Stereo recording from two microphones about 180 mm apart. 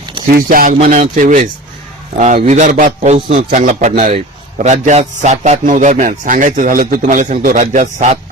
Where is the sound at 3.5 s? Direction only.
45° right (ahead or behind).